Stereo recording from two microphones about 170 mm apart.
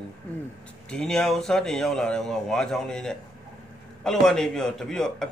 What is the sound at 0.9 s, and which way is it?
Speech, 5° left (ahead or behind).